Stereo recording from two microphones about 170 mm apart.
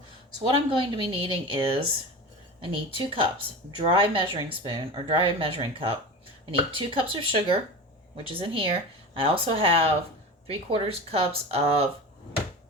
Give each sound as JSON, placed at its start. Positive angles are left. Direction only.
{"t": 0.5, "sound": "speech", "side_deg": -30}